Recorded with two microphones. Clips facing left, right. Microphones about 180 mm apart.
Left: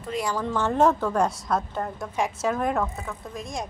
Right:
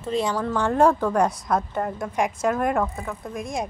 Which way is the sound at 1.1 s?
Centre (ahead or behind).